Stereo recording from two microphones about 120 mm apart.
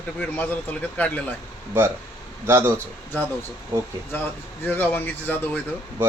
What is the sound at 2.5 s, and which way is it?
Speech, 20° right (ahead or behind).